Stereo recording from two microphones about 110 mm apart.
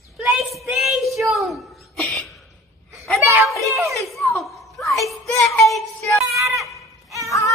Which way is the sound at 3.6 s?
25° right (ahead or behind).